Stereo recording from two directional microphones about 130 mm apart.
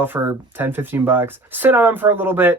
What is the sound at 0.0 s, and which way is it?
Speech, 15° right (ahead or behind).